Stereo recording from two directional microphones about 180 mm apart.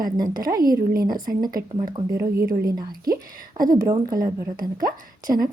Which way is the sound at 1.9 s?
15° right (ahead or behind).